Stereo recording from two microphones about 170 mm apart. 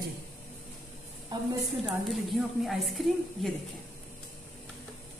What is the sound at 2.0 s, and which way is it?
A woman's voice, centre (ahead or behind).